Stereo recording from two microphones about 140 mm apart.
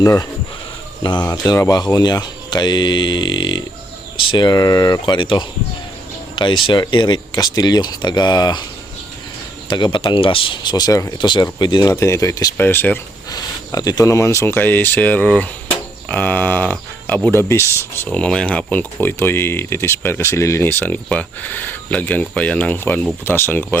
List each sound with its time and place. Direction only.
0.0 s speech: 25° left (ahead or behind)
9.6 s speech: 35° left (ahead or behind)
12.5 s speech: 15° left (ahead or behind)
13.3 s speech: 25° left (ahead or behind)